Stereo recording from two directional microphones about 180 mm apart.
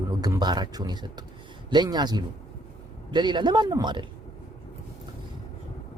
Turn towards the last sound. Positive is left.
turn(degrees=-25)  # may be behind; listen again after turning